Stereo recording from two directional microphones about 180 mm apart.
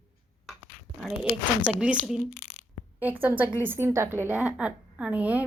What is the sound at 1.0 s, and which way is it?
A woman's voice, 5° right (ahead or behind).